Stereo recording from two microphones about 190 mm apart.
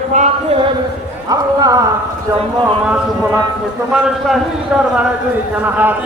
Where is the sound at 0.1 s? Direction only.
35° right (ahead or behind).